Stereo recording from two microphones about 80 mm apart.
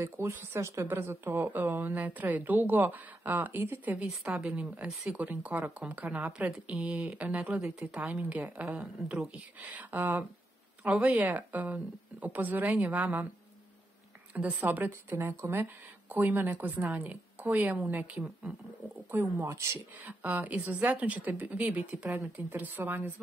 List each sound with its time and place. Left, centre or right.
0.0 s speech: right
14.3 s speech: right
19.3 s speech: right
20.1 s speech: centre